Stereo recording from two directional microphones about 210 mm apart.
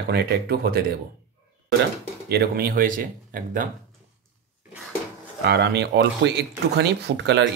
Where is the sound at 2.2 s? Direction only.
45° right (ahead or behind).